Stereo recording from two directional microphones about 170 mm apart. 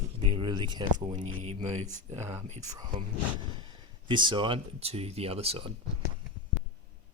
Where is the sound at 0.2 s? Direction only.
30° right (ahead or behind).